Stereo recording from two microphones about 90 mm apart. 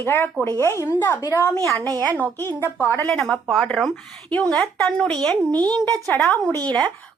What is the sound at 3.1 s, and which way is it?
Speech, 5° left (ahead or behind).